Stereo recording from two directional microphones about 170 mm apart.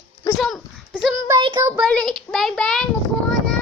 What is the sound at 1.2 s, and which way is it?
Child singing, 25° right (ahead or behind).